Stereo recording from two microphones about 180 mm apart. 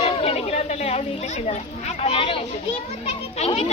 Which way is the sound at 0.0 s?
35° left (ahead or behind).